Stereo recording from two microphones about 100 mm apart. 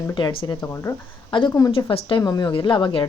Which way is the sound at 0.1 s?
50° left (ahead or behind).